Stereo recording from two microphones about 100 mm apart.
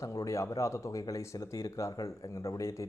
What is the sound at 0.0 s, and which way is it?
Speech, 30° left (ahead or behind).